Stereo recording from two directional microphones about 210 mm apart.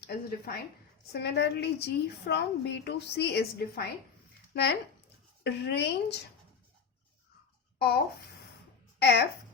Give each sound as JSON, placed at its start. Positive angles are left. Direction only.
{"t": 0.0, "sound": "a sound", "side_deg": 50}
{"t": 1.1, "sound": "a woman's voice", "side_deg": 55}
{"t": 7.8, "sound": "a child's voice", "side_deg": 50}